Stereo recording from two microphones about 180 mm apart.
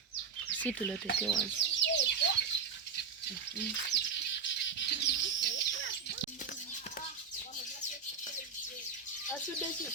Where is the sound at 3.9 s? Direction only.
70° left (ahead or behind).